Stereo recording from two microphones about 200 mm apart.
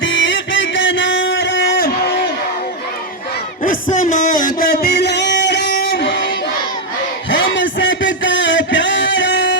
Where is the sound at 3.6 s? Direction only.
40° left (ahead or behind); by 5.6 s 60° left (ahead or behind).